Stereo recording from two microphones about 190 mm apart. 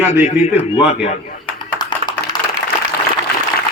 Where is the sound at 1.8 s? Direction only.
20° left (ahead or behind).